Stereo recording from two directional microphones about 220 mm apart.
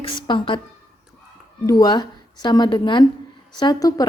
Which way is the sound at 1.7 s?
20° left (ahead or behind).